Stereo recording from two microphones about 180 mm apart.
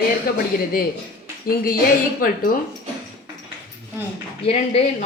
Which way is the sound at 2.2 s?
50° left (ahead or behind).